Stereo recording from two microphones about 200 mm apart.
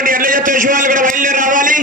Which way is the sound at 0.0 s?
45° right (ahead or behind).